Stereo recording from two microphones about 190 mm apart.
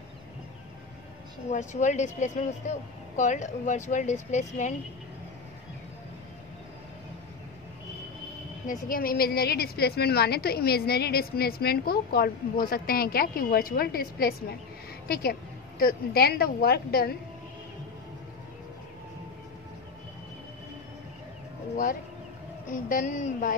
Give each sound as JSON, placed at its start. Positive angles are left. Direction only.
{"t": 1.5, "sound": "speech", "side_deg": 40}
{"t": 8.6, "sound": "a woman's voice", "side_deg": 50}
{"t": 15.8, "sound": "a woman's voice", "side_deg": 50}
{"t": 22.7, "sound": "a woman's voice", "side_deg": 45}